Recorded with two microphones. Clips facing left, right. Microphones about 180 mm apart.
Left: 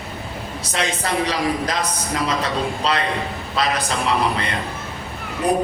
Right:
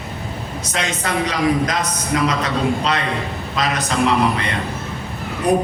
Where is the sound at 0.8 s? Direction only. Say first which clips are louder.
Even; 30° left (ahead or behind).